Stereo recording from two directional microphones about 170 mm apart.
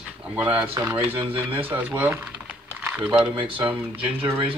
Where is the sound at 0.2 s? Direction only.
10° right (ahead or behind).